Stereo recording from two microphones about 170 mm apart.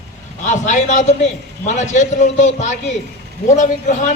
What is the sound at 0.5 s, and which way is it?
A man's voice, 45° left (ahead or behind).